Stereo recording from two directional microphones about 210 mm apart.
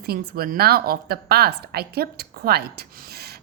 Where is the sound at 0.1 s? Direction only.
45° right (ahead or behind).